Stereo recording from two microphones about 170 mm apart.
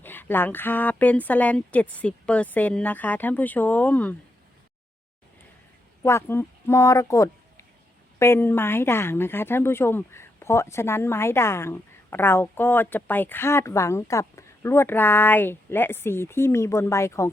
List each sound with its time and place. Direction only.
0.0 s a woman's voice: 10° left (ahead or behind)
6.0 s a woman's voice: 15° left (ahead or behind)